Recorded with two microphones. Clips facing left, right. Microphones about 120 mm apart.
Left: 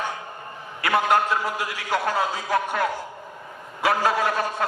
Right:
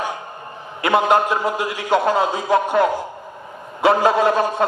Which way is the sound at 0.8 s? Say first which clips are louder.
Right 5 dB; 25° right (ahead or behind).